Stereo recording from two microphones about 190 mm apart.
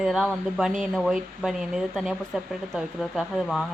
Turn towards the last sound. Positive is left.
turn(degrees=0)  # may be behind; listen again after turning